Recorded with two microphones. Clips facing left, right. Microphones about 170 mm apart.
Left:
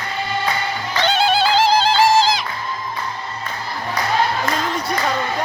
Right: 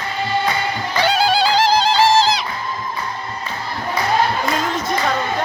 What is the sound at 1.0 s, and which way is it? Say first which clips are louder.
Music: right 1 dB; centre (ahead or behind).